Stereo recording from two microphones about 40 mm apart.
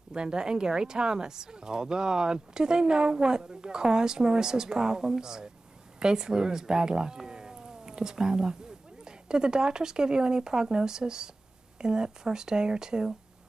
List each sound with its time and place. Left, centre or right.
0.1 s speech: right